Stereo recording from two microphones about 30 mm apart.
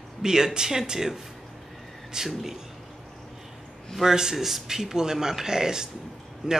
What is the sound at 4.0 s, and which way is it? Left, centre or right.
Speech, centre.